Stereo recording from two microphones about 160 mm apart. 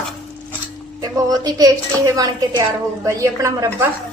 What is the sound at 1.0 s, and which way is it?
Speech, 25° right (ahead or behind).